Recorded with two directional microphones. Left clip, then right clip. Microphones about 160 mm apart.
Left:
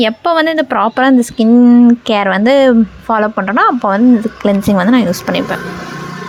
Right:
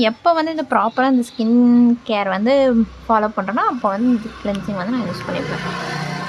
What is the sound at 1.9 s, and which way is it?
A woman's voice, 45° left (ahead or behind).